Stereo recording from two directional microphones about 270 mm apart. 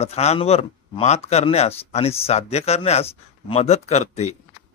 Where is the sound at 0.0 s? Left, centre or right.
Left.